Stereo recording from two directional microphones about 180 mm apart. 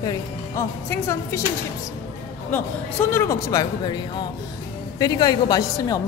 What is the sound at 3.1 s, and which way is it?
Speech, 15° left (ahead or behind).